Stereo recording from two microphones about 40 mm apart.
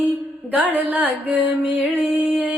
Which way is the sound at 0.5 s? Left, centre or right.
Right.